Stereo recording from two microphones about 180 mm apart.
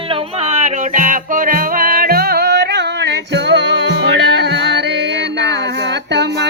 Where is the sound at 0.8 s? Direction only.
45° right (ahead or behind).